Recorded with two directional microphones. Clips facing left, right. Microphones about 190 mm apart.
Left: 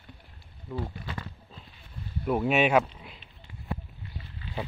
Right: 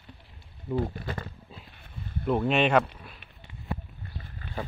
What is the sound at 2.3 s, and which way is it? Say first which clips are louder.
Speech: even; 5° left (ahead or behind).